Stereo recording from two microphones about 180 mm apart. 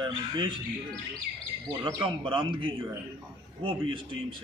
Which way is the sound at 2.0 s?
30° right (ahead or behind).